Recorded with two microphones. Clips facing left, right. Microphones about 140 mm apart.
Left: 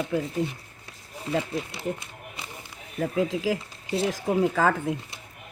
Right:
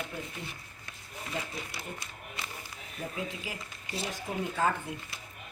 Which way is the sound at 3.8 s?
25° left (ahead or behind).